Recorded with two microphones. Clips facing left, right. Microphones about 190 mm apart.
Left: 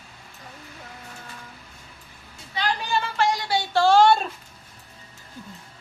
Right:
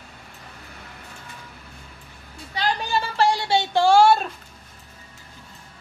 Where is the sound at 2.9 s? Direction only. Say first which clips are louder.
Right 2 dB; 35° right (ahead or behind).